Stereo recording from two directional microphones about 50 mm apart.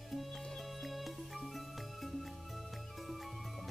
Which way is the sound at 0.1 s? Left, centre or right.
Centre.